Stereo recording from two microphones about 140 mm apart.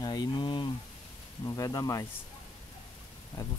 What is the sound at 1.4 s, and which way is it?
Speech, 25° left (ahead or behind).